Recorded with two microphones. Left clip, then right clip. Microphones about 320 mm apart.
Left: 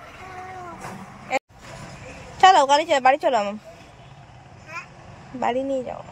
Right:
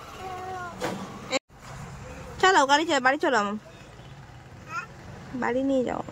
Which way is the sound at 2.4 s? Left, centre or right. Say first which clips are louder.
Left 5 dB; centre.